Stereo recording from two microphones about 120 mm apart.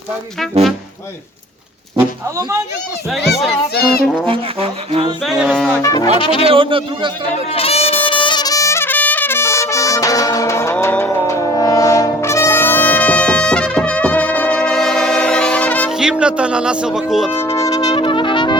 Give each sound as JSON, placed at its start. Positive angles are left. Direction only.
{"t": 4.3, "sound": "music", "side_deg": -55}
{"t": 5.2, "sound": "music", "side_deg": 5}
{"t": 5.8, "sound": "music", "side_deg": 30}
{"t": 6.1, "sound": "speech", "side_deg": 45}
{"t": 6.4, "sound": "speech", "side_deg": -50}
{"t": 7.5, "sound": "music", "side_deg": 55}
{"t": 8.0, "sound": "trumpet", "side_deg": 45}
{"t": 11.2, "sound": "brass instrument", "side_deg": 30}
{"t": 15.9, "sound": "speech", "side_deg": -5}
{"t": 17.3, "sound": "music", "side_deg": 20}
{"t": 17.9, "sound": "music", "side_deg": 45}